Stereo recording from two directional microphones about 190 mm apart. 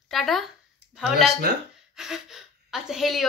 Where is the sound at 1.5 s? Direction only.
60° right (ahead or behind).